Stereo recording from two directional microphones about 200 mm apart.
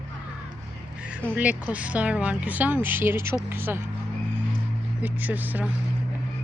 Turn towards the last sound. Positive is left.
turn(degrees=-10)  # may be behind; listen again after turning